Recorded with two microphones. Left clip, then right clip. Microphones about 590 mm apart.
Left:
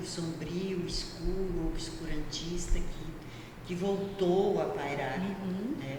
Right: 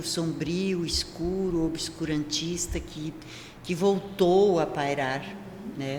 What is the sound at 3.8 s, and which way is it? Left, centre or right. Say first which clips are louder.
Speech: right 8 dB; right.